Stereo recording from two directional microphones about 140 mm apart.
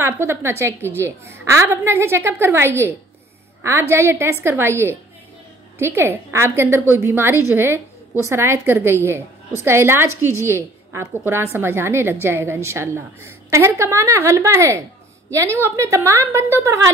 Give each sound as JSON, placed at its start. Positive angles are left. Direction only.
{"t": 0.0, "sound": "a woman's voice", "side_deg": -20}
{"t": 3.9, "sound": "a woman's voice", "side_deg": -15}